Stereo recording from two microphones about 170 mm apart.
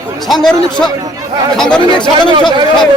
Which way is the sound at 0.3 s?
Centre (ahead or behind).